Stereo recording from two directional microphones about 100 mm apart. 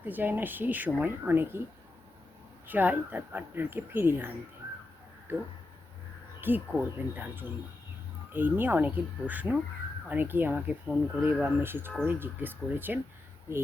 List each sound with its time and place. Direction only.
0.0 s speech: 20° right (ahead or behind)
2.6 s speech: 20° right (ahead or behind)
5.3 s speech: 20° right (ahead or behind)
10.8 s speech: 5° right (ahead or behind)
11.4 s speech: 20° right (ahead or behind)